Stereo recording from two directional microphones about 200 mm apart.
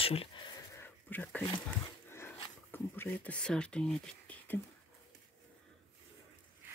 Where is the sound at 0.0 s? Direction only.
30° left (ahead or behind).